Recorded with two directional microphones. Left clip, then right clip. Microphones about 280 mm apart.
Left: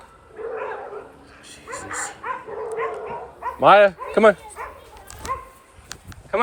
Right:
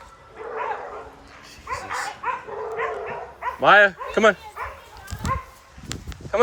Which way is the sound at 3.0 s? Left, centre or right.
Right.